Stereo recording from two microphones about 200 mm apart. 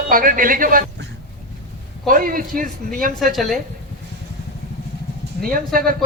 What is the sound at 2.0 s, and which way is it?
Speech, 45° right (ahead or behind).